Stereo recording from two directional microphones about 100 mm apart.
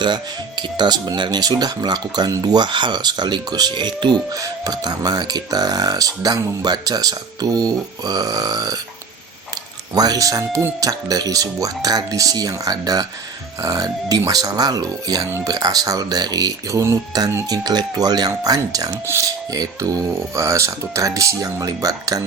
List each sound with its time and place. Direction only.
0.0 s speech: 50° right (ahead or behind)
9.9 s speech: 40° right (ahead or behind)
19.0 s speech: 25° right (ahead or behind)
19.5 s speech: 40° right (ahead or behind)